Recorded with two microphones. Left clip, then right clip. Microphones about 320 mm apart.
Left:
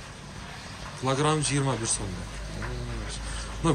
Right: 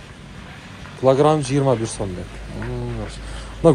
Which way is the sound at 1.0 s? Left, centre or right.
Centre.